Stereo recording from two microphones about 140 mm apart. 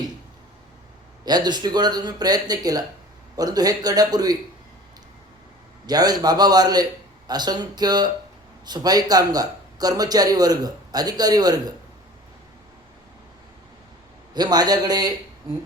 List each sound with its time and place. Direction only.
1.2 s a man's voice: 30° right (ahead or behind)
5.8 s a man's voice: 30° right (ahead or behind)
14.3 s a man's voice: 30° right (ahead or behind)